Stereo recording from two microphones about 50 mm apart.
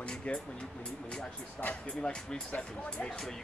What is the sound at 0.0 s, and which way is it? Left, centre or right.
Music, left.